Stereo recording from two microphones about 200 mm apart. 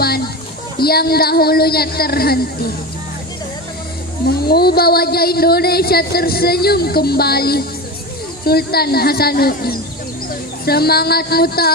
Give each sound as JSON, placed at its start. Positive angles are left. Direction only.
{"t": 0.7, "sound": "speech", "side_deg": 50}
{"t": 4.3, "sound": "speech", "side_deg": 50}